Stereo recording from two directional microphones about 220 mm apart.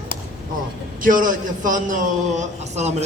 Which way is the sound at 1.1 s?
40° right (ahead or behind).